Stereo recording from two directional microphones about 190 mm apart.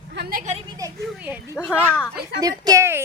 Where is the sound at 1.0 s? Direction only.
5° right (ahead or behind).